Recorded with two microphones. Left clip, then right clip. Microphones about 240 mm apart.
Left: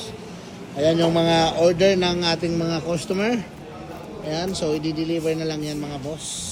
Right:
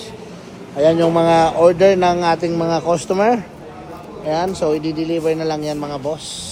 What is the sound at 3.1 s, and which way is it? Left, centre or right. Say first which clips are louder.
Speech: right 8 dB; centre.